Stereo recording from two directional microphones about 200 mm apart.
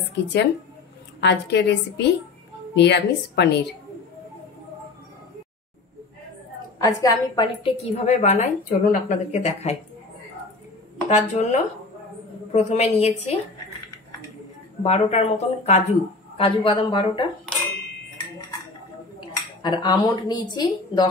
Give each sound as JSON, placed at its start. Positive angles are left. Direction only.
{"t": 0.1, "sound": "a woman's voice", "side_deg": 60}
{"t": 6.8, "sound": "a woman's voice", "side_deg": 15}
{"t": 7.6, "sound": "a woman's voice", "side_deg": 30}
{"t": 11.1, "sound": "a woman's voice", "side_deg": 35}
{"t": 12.5, "sound": "a woman's voice", "side_deg": 35}
{"t": 14.8, "sound": "a woman's voice", "side_deg": 30}
{"t": 19.1, "sound": "speech", "side_deg": 25}